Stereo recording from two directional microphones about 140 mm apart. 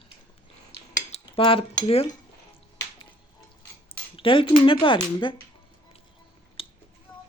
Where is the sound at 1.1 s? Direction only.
40° left (ahead or behind).